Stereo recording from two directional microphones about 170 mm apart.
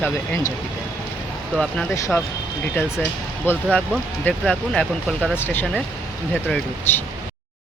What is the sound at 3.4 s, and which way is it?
A woman's voice, 10° left (ahead or behind).